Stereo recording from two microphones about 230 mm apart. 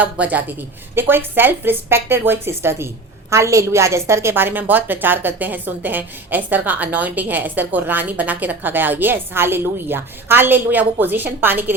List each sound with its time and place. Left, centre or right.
0.0 s a woman's voice: centre